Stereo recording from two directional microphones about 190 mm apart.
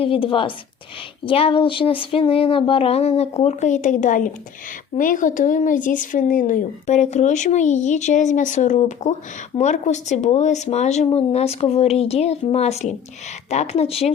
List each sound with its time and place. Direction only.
0.0 s speech: 30° left (ahead or behind)